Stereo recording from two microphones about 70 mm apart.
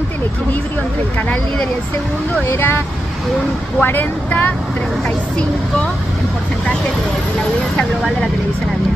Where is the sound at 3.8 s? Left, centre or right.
Left.